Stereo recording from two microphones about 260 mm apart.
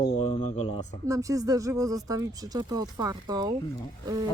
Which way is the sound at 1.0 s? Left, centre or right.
Centre.